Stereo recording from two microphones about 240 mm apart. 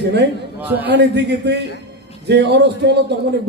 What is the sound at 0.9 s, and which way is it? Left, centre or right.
A man's voice, right.